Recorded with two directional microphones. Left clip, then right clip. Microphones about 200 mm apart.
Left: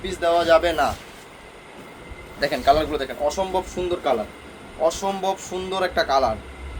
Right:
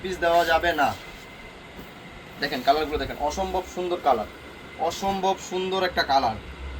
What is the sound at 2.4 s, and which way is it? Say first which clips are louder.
Speech: left 4 dB; 70° left (ahead or behind).